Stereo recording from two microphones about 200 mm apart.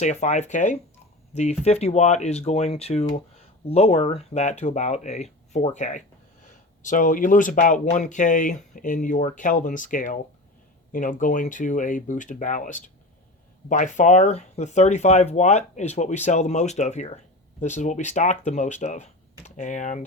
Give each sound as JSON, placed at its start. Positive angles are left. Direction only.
{"t": 0.0, "sound": "speech", "side_deg": 35}